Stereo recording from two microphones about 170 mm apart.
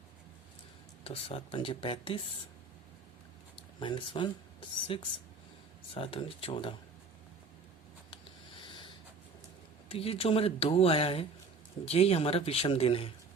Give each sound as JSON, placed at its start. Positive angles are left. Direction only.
{"t": 1.0, "sound": "speech", "side_deg": 35}
{"t": 3.8, "sound": "speech", "side_deg": 30}
{"t": 8.6, "sound": "snort", "side_deg": 30}
{"t": 9.9, "sound": "speech", "side_deg": 35}